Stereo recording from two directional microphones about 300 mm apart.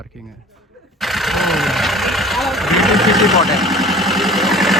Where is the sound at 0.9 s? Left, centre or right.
Centre.